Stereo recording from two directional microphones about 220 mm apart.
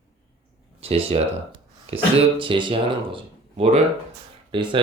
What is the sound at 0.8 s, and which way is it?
Speech, 25° right (ahead or behind).